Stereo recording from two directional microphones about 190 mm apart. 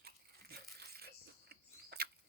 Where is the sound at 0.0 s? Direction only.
55° right (ahead or behind).